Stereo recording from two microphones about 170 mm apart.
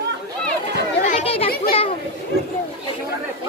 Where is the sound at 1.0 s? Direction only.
45° left (ahead or behind).